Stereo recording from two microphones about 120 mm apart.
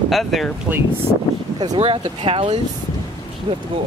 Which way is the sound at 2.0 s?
45° right (ahead or behind).